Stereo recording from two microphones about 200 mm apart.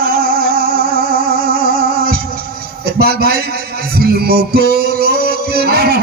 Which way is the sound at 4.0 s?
50° right (ahead or behind).